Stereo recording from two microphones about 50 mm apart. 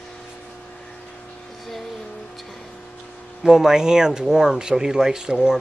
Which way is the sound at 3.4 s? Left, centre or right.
Centre.